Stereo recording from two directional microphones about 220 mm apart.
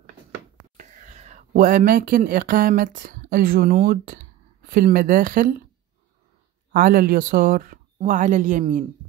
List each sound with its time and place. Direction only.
0.7 s speech: 35° right (ahead or behind)
6.7 s speech: 40° right (ahead or behind)